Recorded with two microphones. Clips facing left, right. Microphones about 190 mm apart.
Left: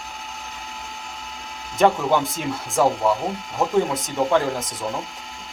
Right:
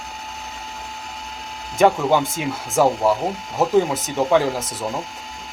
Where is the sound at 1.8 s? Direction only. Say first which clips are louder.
Right 2 dB; centre (ahead or behind).